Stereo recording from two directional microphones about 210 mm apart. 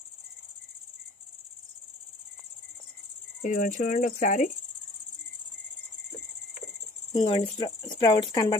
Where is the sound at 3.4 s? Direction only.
40° left (ahead or behind).